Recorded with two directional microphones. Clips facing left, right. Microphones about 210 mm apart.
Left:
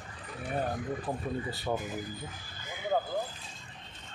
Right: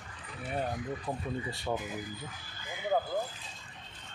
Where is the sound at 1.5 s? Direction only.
Centre (ahead or behind).